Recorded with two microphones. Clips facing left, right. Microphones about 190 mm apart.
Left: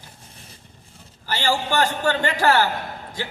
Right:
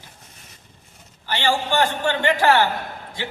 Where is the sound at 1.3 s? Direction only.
40° left (ahead or behind).